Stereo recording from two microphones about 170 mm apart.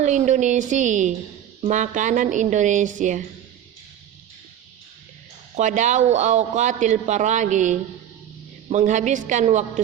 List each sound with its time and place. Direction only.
0.0 s a man's voice: 45° right (ahead or behind)
5.5 s a man's voice: 45° right (ahead or behind)